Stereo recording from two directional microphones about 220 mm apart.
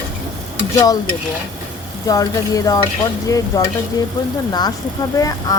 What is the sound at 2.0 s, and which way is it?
Speech, 15° left (ahead or behind).